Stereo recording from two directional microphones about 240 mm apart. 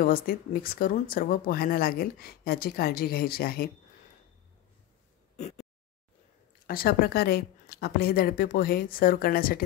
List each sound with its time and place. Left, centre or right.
0.0 s speech: left
6.7 s speech: left